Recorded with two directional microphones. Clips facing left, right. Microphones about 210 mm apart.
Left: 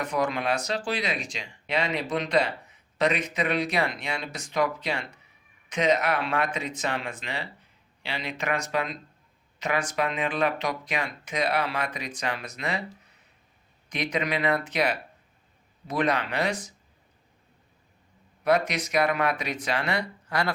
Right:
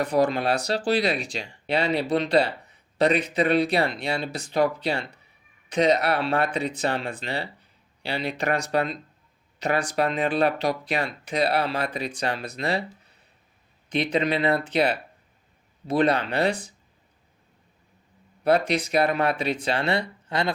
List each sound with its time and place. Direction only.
0.0 s speech: 35° right (ahead or behind)
13.9 s speech: 30° right (ahead or behind)
18.4 s speech: 30° right (ahead or behind)